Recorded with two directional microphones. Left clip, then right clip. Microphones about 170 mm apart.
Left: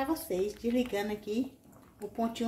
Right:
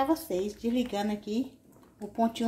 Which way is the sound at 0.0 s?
30° right (ahead or behind).